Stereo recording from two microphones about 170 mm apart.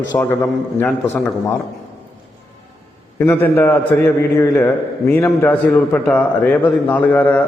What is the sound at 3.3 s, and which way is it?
A man's voice, 10° left (ahead or behind).